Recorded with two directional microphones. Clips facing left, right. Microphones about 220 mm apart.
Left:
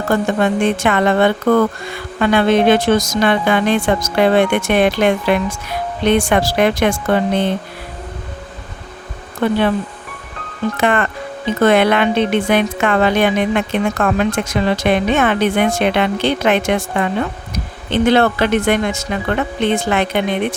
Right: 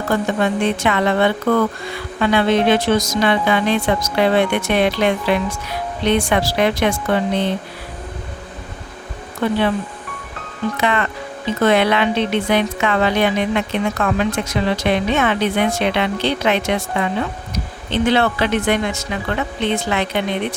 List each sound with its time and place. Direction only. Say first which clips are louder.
0.4 s speech: left 3 dB; 50° left (ahead or behind)
9.4 s speech: left 3 dB; 55° left (ahead or behind)
10.8 s speech: left 4 dB; 50° left (ahead or behind)